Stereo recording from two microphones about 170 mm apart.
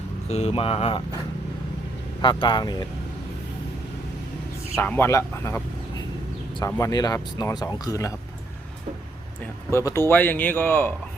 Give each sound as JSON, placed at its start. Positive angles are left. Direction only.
{"t": 0.3, "sound": "speech", "side_deg": 40}
{"t": 2.2, "sound": "speech", "side_deg": 30}
{"t": 4.8, "sound": "a man's voice", "side_deg": 15}
{"t": 9.6, "sound": "a man's voice", "side_deg": 15}